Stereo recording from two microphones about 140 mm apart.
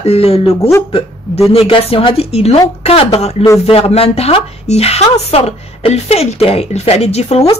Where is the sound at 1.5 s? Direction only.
45° left (ahead or behind).